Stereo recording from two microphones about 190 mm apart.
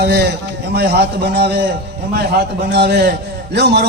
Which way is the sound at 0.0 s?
60° right (ahead or behind).